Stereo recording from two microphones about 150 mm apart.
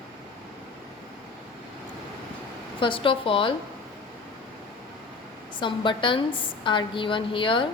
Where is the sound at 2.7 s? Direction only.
35° left (ahead or behind).